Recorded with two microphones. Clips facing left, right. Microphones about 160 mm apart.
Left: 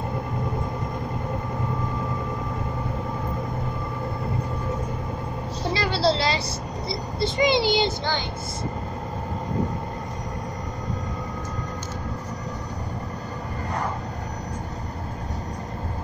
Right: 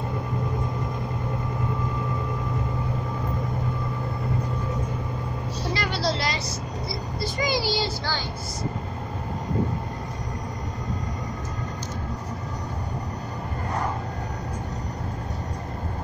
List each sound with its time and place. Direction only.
5.8 s vehicle: 30° left (ahead or behind)